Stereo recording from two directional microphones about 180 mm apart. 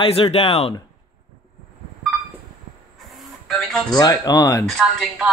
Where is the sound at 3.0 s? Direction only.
Centre (ahead or behind).